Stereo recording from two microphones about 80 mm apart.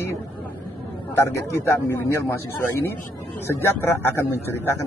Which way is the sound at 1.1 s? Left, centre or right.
Left.